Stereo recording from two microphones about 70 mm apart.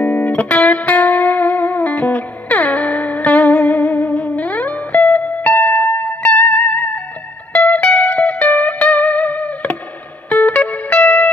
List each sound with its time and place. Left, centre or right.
0.0 s music: left